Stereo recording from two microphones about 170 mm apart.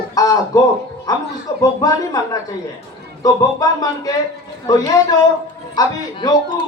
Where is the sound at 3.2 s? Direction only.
20° left (ahead or behind).